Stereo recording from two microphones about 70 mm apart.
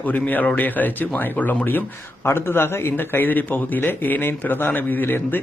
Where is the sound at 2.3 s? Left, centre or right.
Left.